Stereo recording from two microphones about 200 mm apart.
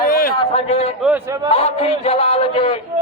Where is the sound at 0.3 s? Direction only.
30° left (ahead or behind).